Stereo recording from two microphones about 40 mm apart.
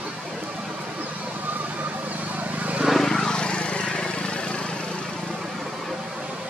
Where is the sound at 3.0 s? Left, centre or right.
Centre.